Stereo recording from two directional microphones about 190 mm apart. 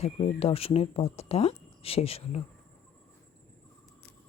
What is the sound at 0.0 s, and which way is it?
Speech, 30° left (ahead or behind).